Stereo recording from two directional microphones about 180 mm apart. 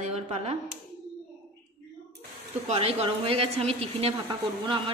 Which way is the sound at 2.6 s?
35° right (ahead or behind).